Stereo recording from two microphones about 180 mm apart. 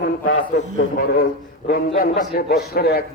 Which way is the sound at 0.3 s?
45° left (ahead or behind).